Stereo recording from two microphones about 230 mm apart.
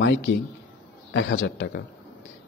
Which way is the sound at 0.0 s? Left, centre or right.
Left.